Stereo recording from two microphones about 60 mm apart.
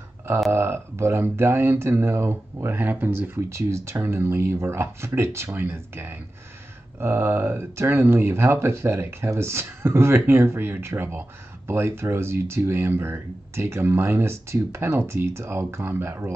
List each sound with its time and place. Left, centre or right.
0.5 s speech: right
3.4 s speech: right